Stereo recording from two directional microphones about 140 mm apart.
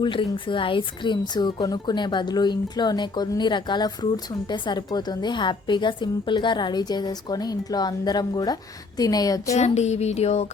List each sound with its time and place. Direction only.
0.0 s a woman's voice: 35° left (ahead or behind)
9.6 s speech: 55° left (ahead or behind)